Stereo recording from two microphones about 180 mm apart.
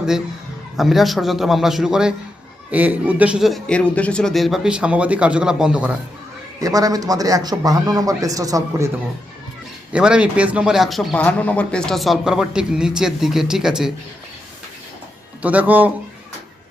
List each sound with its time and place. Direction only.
0.8 s speech: centre (ahead or behind)
6.6 s a man's voice: 20° right (ahead or behind)
9.9 s speech: 5° right (ahead or behind)
15.4 s a man's voice: 10° right (ahead or behind)